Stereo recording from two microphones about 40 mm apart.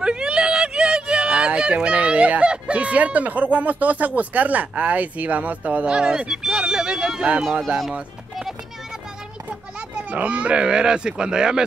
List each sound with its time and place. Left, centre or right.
0.0 s speech: right
5.9 s speech: right
9.5 s a child's voice: right; by 11.6 s centre